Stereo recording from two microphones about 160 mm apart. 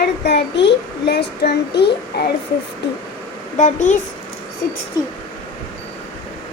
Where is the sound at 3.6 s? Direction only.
50° left (ahead or behind).